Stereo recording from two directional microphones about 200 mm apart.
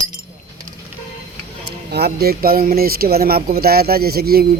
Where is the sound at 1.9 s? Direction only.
55° right (ahead or behind).